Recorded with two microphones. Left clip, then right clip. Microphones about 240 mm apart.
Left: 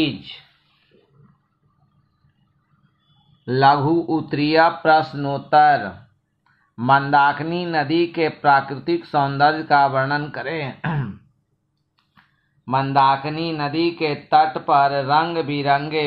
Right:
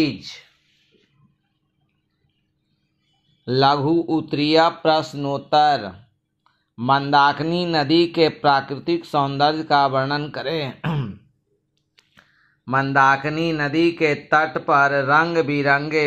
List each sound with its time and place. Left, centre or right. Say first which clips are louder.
3.4 s speech: left 2 dB; right
12.6 s speech: even; centre